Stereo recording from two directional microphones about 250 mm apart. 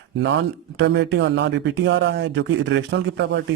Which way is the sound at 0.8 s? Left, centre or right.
Right.